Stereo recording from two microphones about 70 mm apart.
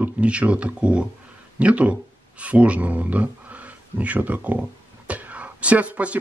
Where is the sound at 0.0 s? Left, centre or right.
Centre.